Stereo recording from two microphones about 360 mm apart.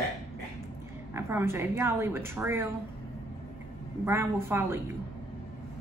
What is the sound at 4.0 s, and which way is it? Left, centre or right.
Speech, centre.